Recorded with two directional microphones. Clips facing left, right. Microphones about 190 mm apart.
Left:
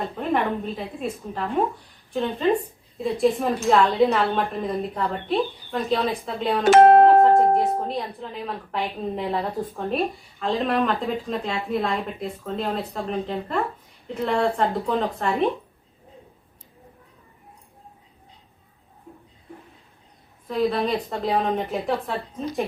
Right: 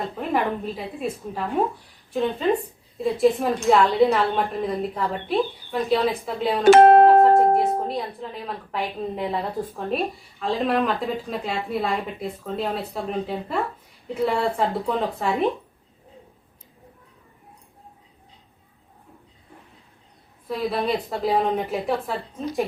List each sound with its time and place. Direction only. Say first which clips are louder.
0.0 s speech: even; centre (ahead or behind)
20.5 s speech: left 2 dB; centre (ahead or behind)